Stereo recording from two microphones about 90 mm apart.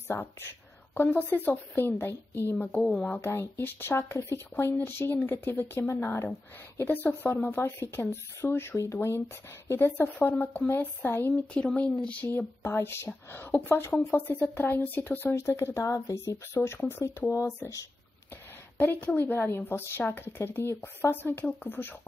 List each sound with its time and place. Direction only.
0.9 s a woman's voice: 20° left (ahead or behind)
3.2 s speech: 30° left (ahead or behind)
18.8 s speech: 20° left (ahead or behind)